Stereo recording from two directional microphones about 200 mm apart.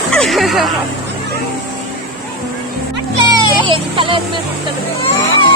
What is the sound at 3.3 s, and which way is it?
Speech, 25° right (ahead or behind).